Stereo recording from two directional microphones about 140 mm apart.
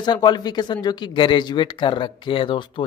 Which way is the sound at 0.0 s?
30° left (ahead or behind).